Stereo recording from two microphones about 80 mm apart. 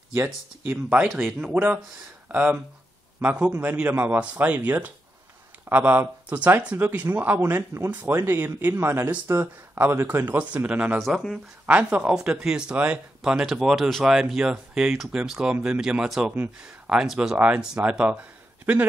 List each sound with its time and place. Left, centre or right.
0.1 s speech: right
11.0 s speech: centre
11.6 s speech: centre